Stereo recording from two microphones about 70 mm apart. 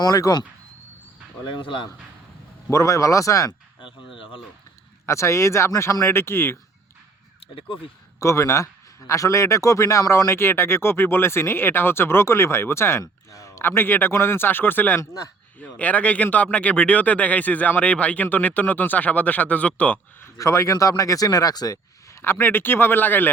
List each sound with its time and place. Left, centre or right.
0.0 s speech: left
2.6 s speech: left
5.0 s speech: left
6.1 s a man's voice: left
8.2 s a man's voice: left
13.7 s a man's voice: left
20.2 s speech: left
22.2 s a man's voice: left